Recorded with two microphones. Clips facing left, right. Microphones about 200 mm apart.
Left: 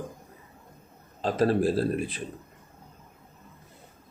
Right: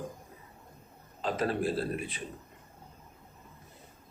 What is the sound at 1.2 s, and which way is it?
Speech, 40° left (ahead or behind).